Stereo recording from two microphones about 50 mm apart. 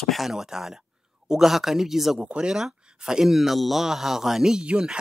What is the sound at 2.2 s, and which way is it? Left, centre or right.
Speech, centre.